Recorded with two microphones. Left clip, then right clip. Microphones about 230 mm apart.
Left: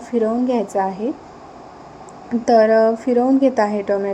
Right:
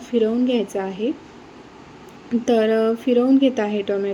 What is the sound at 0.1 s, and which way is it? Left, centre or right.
Speech, left.